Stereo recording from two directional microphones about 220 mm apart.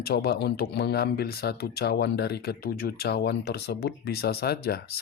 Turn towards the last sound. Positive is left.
turn(degrees=45)  # may be behind; listen again after turning